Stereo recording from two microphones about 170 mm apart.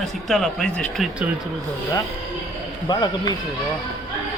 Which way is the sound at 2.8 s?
25° left (ahead or behind).